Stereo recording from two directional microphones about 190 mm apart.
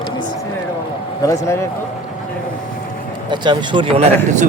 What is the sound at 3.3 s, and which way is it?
Speech, 25° right (ahead or behind).